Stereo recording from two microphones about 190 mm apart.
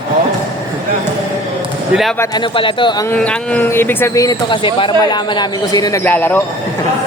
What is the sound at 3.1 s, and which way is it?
Speech, 5° left (ahead or behind).